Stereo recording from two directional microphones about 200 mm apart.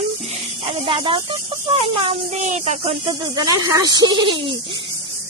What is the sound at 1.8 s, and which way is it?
Speech, 30° right (ahead or behind).